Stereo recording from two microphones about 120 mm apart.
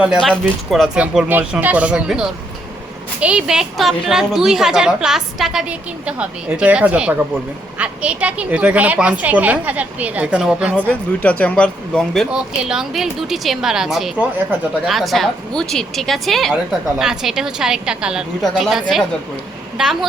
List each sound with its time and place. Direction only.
0.2 s a woman's voice: centre (ahead or behind)
1.0 s a woman's voice: 15° right (ahead or behind)
10.8 s a woman's voice: 10° left (ahead or behind)